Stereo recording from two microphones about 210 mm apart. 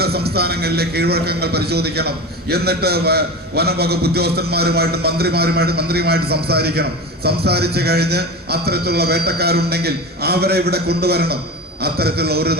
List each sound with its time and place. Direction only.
0.0 s a man's voice: 50° right (ahead or behind)